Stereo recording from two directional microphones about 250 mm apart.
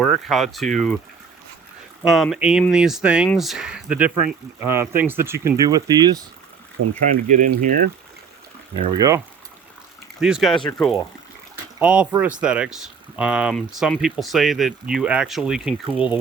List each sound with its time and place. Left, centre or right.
0.0 s speech: centre
2.0 s speech: centre
7.0 s speech: right
9.0 s speech: centre
10.2 s speech: centre
10.6 s speech: centre
11.8 s speech: centre